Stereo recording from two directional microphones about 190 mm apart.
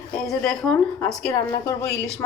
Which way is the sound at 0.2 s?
Centre (ahead or behind).